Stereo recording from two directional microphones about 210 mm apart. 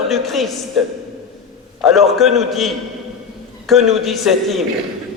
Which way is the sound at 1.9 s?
Centre (ahead or behind).